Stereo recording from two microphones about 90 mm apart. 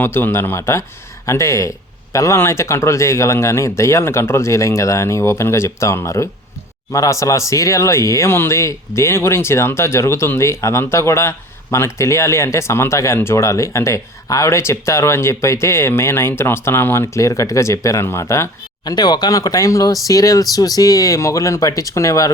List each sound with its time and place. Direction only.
0.0 s speech: 25° left (ahead or behind)
18.9 s speech: 50° left (ahead or behind)